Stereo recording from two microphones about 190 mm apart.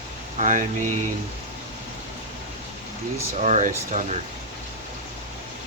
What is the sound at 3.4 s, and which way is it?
Speech, 40° right (ahead or behind).